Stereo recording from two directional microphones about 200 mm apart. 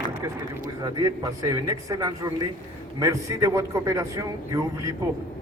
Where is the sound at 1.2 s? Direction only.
15° right (ahead or behind).